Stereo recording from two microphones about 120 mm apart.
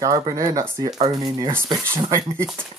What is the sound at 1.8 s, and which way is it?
Speech, 20° right (ahead or behind).